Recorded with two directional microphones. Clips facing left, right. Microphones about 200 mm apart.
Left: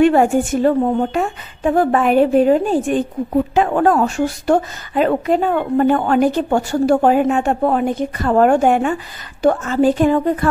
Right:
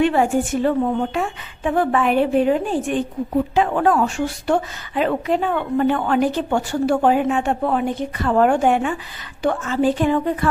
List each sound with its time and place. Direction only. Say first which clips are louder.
0.0 s a woman's voice: left 5 dB; 45° left (ahead or behind)